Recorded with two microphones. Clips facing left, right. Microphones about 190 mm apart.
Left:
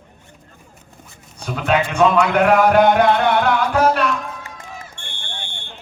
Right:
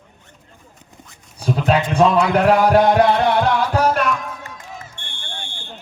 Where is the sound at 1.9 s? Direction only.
35° right (ahead or behind).